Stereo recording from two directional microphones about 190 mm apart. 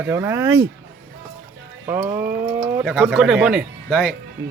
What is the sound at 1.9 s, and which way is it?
Speech, 10° right (ahead or behind).